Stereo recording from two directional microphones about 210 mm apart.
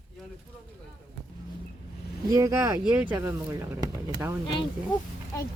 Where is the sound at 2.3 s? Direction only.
15° right (ahead or behind).